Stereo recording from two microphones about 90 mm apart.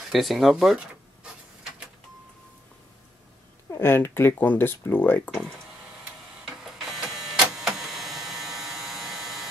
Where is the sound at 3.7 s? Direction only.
25° left (ahead or behind).